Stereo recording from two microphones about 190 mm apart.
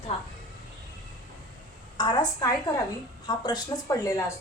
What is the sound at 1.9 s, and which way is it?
Speech, 20° left (ahead or behind).